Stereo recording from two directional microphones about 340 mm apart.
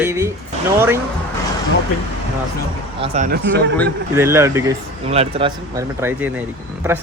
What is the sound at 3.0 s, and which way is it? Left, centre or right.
Speech, right.